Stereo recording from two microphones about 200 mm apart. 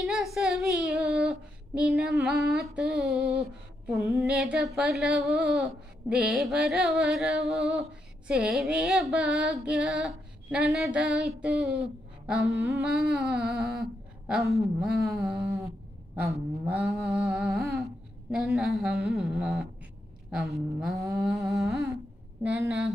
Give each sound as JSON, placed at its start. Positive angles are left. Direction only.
{"t": 0.0, "sound": "child singing", "side_deg": 0}
{"t": 2.2, "sound": "speech", "side_deg": 0}
{"t": 3.9, "sound": "a woman's voice", "side_deg": -15}
{"t": 4.3, "sound": "speech", "side_deg": 0}
{"t": 12.8, "sound": "humming", "side_deg": 0}
{"t": 14.8, "sound": "speech", "side_deg": 0}
{"t": 15.4, "sound": "a woman's voice", "side_deg": -15}
{"t": 20.9, "sound": "a woman's voice", "side_deg": -15}
{"t": 21.2, "sound": "a woman's voice", "side_deg": 0}